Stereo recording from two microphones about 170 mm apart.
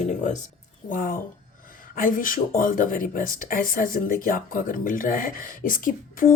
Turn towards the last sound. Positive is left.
turn(degrees=55)  # may be behind; listen again after turning